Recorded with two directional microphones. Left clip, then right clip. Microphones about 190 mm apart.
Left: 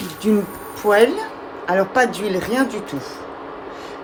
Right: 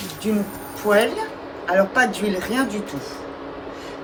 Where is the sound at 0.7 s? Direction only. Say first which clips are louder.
Left 4 dB; 35° left (ahead or behind).